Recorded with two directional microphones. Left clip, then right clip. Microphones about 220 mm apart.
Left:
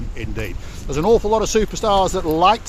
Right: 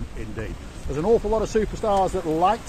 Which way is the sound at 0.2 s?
45° left (ahead or behind).